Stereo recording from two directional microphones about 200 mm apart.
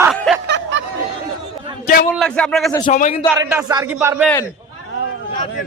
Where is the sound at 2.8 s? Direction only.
40° left (ahead or behind).